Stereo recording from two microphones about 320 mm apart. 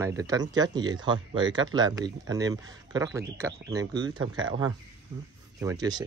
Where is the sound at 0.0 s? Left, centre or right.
Centre.